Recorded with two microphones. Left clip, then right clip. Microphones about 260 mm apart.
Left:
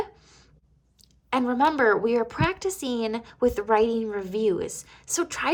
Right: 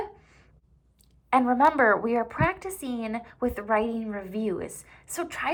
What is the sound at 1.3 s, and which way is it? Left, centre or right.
A woman's voice, centre.